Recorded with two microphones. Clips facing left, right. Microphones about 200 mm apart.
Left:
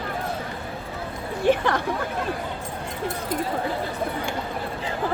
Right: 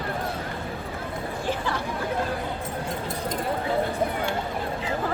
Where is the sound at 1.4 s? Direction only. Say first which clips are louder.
Left 9 dB; 65° left (ahead or behind).